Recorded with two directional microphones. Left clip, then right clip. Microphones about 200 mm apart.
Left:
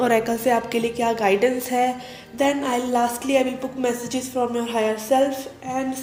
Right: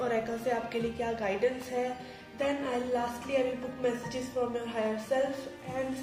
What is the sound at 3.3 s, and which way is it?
A woman's voice, 50° left (ahead or behind).